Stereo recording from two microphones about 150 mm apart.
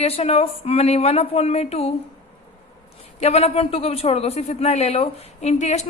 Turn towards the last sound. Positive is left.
turn(degrees=50)  # may be behind; listen again after turning